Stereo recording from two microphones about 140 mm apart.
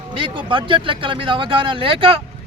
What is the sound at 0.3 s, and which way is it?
Speech, 35° right (ahead or behind).